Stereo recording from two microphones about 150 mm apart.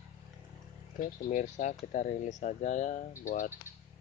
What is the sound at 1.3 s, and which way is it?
Speech, 55° left (ahead or behind).